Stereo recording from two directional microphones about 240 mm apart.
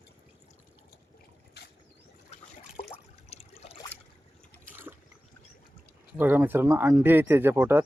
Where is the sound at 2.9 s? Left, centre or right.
Left.